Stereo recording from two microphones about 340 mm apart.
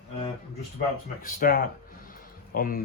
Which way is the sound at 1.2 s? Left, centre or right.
Left.